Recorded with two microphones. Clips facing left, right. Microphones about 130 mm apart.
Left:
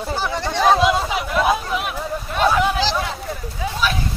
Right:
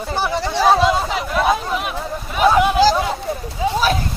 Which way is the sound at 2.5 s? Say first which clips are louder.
Right 6 dB; 15° right (ahead or behind).